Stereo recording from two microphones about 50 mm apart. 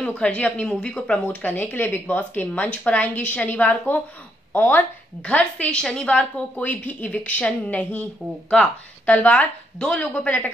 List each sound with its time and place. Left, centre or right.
0.1 s a woman's voice: left
5.2 s a woman's voice: left
6.6 s a woman's voice: left
9.1 s a woman's voice: left
9.8 s a woman's voice: centre
10.2 s a woman's voice: left